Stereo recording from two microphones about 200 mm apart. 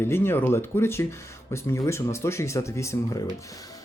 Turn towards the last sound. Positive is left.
turn(degrees=15)  # may be behind; listen again after turning